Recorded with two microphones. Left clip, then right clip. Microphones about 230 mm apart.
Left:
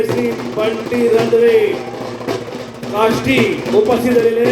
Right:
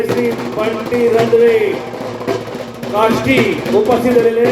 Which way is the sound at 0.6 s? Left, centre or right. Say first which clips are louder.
Even; left.